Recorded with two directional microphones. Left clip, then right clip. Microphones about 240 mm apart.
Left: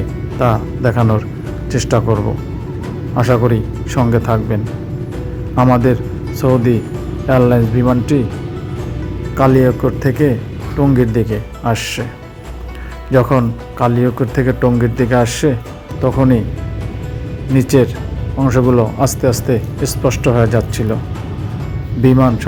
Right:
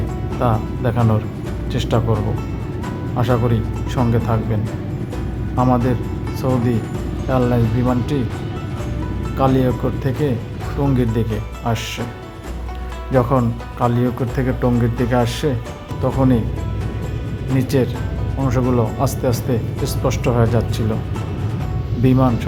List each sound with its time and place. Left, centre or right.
0.3 s speech: centre
3.2 s speech: centre
5.6 s speech: centre
9.4 s speech: centre
13.1 s speech: centre
17.6 s speech: centre
22.0 s speech: centre